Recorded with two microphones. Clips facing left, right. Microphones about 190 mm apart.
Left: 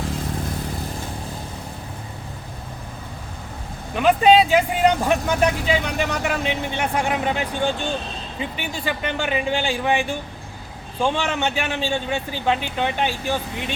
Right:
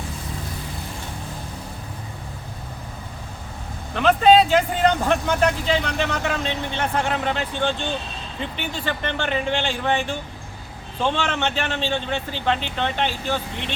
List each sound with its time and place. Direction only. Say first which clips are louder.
3.9 s speech: even; 10° left (ahead or behind)